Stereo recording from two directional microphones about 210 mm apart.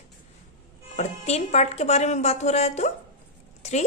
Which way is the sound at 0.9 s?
30° left (ahead or behind).